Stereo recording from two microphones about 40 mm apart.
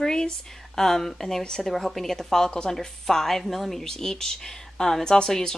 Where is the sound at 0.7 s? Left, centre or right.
Centre.